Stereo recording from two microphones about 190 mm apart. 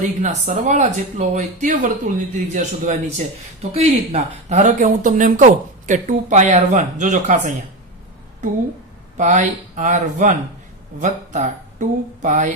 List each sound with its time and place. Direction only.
0.0 s speech: 40° right (ahead or behind)
9.1 s speech: 40° right (ahead or behind)